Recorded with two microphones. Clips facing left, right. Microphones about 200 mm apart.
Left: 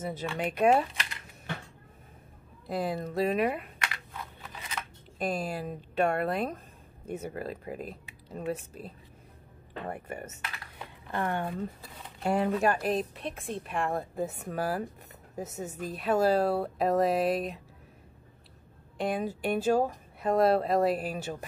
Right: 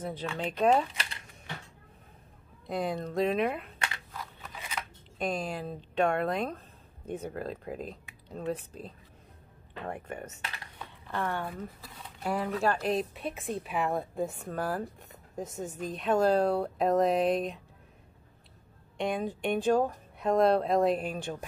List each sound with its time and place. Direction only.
0.0 s speech: 10° left (ahead or behind)
2.6 s speech: centre (ahead or behind)
5.2 s speech: 5° left (ahead or behind)
11.1 s speech: 20° left (ahead or behind)
12.6 s speech: 5° left (ahead or behind)
18.9 s speech: 5° left (ahead or behind)